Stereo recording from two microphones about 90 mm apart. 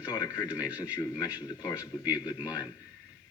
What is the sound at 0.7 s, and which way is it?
Speech, 15° right (ahead or behind).